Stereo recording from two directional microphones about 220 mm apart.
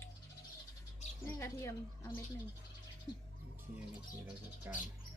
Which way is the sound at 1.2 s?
10° left (ahead or behind).